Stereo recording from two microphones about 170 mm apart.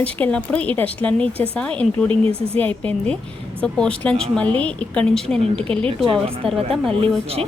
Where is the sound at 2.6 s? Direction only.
10° left (ahead or behind).